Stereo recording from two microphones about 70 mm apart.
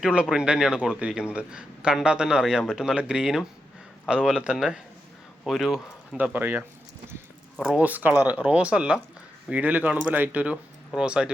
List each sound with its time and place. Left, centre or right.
0.0 s a man's voice: centre
6.3 s speech: right
7.8 s speech: right